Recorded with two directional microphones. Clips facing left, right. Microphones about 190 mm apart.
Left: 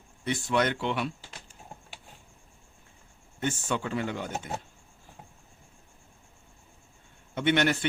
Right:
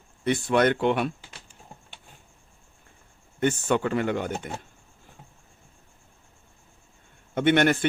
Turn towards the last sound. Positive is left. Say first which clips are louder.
# right 5 dB
turn(degrees=-50)  # may be behind; listen again after turning